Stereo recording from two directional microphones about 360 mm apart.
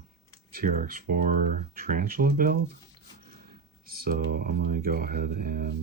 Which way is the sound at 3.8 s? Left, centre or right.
Right.